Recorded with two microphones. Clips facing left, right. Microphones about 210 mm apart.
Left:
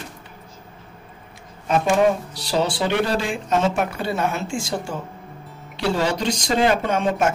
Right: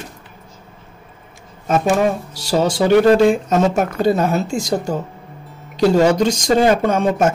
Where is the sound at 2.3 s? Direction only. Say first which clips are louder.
Right 5 dB; 45° right (ahead or behind).